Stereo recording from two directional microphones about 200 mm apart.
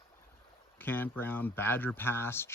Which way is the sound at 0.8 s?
10° left (ahead or behind).